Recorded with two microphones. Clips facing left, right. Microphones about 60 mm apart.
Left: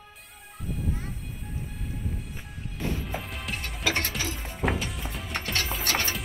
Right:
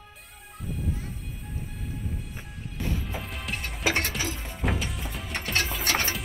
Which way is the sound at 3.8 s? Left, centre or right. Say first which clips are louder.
Right 2 dB; right.